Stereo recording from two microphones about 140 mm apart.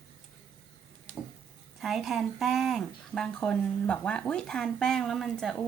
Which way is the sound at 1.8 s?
Centre (ahead or behind).